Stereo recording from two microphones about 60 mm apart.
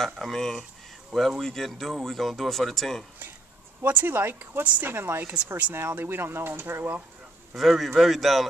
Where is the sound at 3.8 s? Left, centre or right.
Right.